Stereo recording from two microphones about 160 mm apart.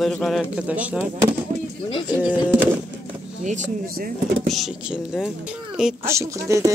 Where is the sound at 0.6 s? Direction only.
10° right (ahead or behind).